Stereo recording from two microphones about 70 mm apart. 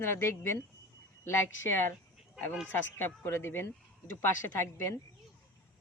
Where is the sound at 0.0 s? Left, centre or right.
Left.